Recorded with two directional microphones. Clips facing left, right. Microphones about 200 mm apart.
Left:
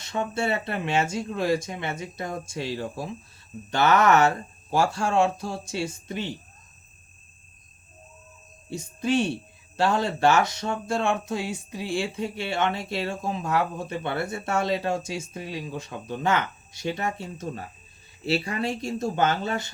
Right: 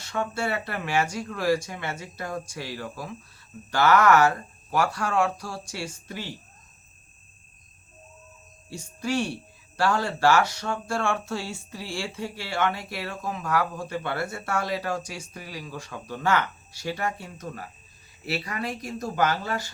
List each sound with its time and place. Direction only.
0.0 s speech: 20° left (ahead or behind)
8.7 s speech: 20° left (ahead or behind)